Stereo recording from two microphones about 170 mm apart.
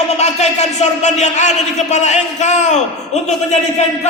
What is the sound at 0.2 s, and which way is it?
Speech, 40° left (ahead or behind).